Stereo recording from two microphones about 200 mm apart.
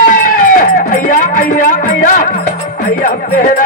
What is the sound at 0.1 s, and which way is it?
Music, 40° left (ahead or behind).